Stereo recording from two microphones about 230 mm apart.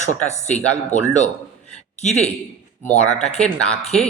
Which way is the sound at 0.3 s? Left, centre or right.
Left.